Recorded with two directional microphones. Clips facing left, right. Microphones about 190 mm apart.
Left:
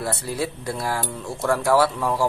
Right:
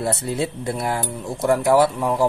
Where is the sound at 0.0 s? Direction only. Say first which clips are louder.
Right 3 dB; 25° right (ahead or behind).